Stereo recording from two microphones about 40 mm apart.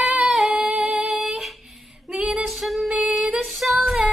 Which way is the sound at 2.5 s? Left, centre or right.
Centre.